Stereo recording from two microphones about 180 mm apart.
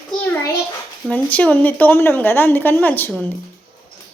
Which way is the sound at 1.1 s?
10° left (ahead or behind).